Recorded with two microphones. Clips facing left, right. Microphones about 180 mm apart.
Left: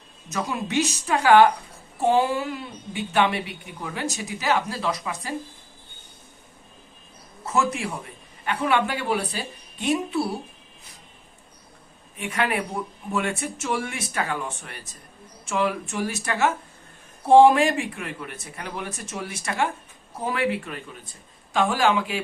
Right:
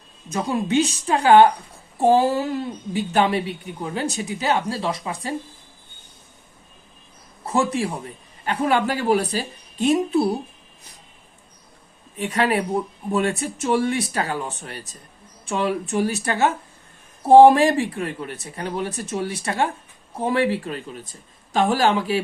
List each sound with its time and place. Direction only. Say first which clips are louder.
0.3 s a woman's voice: right 6 dB; 30° right (ahead or behind)
7.4 s a woman's voice: right 3 dB; 35° right (ahead or behind)
12.1 s a woman's voice: right 5 dB; 35° right (ahead or behind)